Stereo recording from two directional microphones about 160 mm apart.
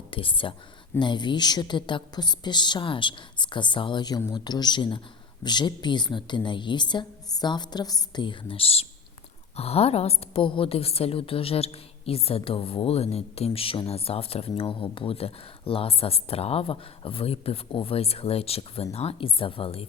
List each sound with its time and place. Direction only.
0.1 s a woman's voice: 35° left (ahead or behind)